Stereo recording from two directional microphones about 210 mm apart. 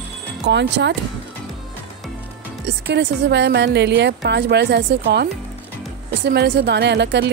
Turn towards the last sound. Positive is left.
turn(degrees=-55)  # may be behind; listen again after turning